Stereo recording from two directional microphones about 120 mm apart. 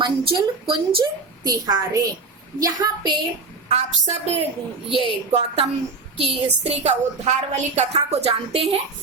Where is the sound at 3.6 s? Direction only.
60° right (ahead or behind).